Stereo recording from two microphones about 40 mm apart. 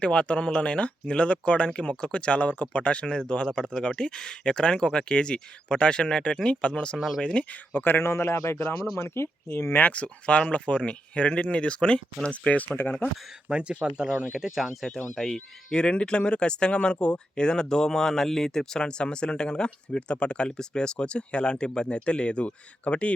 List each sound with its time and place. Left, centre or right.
0.0 s speech: left
6.9 s speech: centre
7.2 s speech: left
7.7 s a man's voice: left
9.9 s speech: left
13.5 s speech: right; by 14.7 s centre
14.7 s speech: centre
15.7 s speech: left